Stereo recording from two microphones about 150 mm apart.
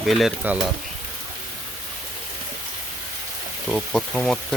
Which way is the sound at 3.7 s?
5° left (ahead or behind).